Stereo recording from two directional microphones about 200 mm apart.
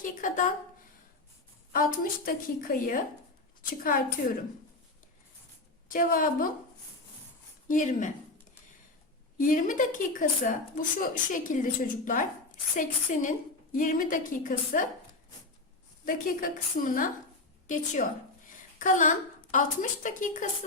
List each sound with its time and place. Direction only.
0.0 s speech: 40° left (ahead or behind)
1.7 s a woman's voice: 45° left (ahead or behind)
5.9 s a woman's voice: 45° left (ahead or behind)
7.7 s speech: 40° left (ahead or behind)
9.4 s speech: 40° left (ahead or behind)
16.0 s a woman's voice: 45° left (ahead or behind)